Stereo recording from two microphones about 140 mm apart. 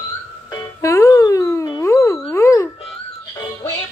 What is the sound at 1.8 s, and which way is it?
Wail, 20° left (ahead or behind).